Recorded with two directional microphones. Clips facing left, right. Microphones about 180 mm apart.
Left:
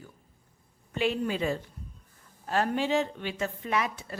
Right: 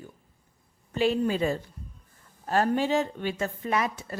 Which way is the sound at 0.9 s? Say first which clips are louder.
Right 4 dB; 35° right (ahead or behind).